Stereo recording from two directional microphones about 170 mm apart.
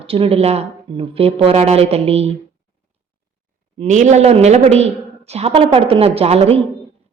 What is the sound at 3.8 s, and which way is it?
A woman's voice, 45° right (ahead or behind).